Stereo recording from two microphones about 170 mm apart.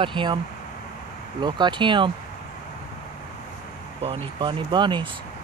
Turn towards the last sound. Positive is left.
turn(degrees=-25)  # may be behind; listen again after turning